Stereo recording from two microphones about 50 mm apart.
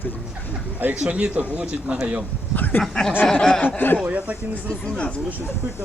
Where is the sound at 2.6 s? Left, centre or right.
Left.